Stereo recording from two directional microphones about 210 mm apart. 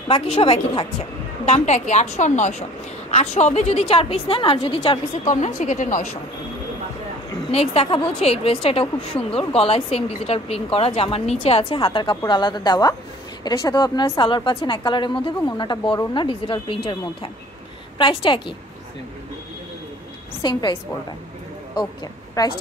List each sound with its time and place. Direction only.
0.1 s a woman's voice: 25° left (ahead or behind)
7.5 s a woman's voice: 30° left (ahead or behind)
20.4 s a woman's voice: 20° left (ahead or behind)
21.7 s speech: 20° left (ahead or behind)